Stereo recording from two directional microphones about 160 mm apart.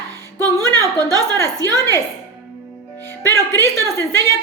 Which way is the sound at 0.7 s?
20° right (ahead or behind).